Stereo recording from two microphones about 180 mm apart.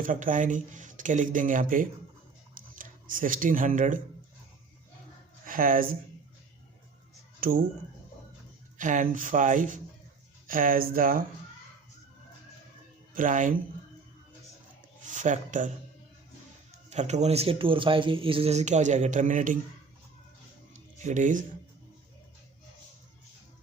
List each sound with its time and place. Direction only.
0.0 s speech: 45° right (ahead or behind)
5.5 s speech: 50° right (ahead or behind)
7.4 s speech: 50° right (ahead or behind)
8.8 s speech: 45° right (ahead or behind)
13.1 s speech: 45° right (ahead or behind)
15.0 s speech: 45° right (ahead or behind)
16.9 s speech: 40° right (ahead or behind)
20.7 s music: 45° right (ahead or behind)